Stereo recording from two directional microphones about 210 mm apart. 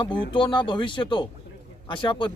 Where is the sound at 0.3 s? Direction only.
20° left (ahead or behind).